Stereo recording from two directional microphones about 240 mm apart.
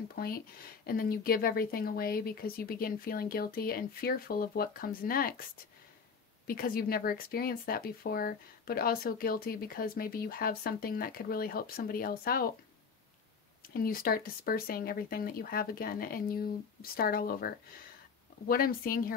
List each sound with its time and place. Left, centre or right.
0.1 s speech: left
6.4 s speech: left
13.7 s speech: left
18.5 s speech: left